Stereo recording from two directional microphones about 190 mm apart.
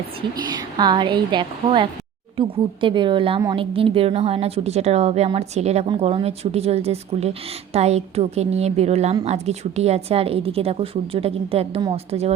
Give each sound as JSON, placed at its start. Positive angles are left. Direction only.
{"t": 0.5, "sound": "a woman's voice", "side_deg": -20}